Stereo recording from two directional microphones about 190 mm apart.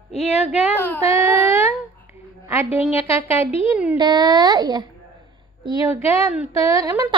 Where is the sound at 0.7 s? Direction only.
10° left (ahead or behind).